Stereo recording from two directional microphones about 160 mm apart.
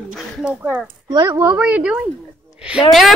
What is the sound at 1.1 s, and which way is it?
Speech, 25° right (ahead or behind).